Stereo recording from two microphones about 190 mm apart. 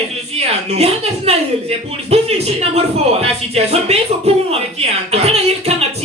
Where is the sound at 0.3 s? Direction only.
35° right (ahead or behind).